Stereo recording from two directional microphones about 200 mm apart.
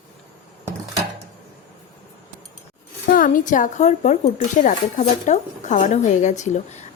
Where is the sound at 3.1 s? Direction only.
40° left (ahead or behind).